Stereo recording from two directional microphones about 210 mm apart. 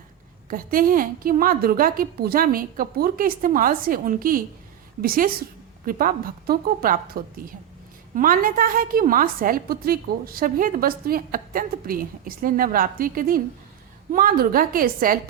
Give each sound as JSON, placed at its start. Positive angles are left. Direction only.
{"t": 0.5, "sound": "a woman's voice", "side_deg": -40}